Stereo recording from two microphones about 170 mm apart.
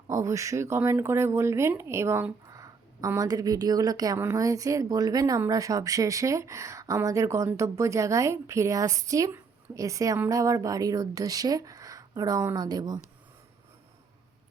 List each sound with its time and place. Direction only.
0.1 s speech: 20° right (ahead or behind)